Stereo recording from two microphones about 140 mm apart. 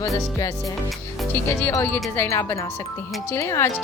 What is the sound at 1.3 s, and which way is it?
Speech, 15° left (ahead or behind).